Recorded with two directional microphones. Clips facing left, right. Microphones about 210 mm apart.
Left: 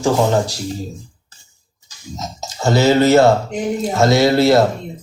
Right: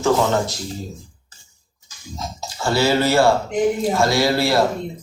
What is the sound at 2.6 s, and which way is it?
A man's voice, 20° left (ahead or behind).